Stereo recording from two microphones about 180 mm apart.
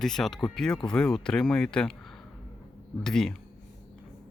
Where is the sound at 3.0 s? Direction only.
Centre (ahead or behind).